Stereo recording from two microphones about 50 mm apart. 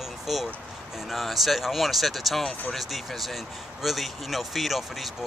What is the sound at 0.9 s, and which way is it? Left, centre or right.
Speech, centre.